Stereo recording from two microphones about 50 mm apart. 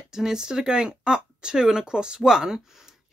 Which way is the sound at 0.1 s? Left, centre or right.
Centre.